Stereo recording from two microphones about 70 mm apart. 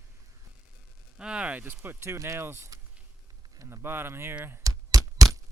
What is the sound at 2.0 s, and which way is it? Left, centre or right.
Speech, right.